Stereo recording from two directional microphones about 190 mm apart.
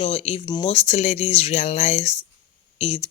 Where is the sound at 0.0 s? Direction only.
30° left (ahead or behind).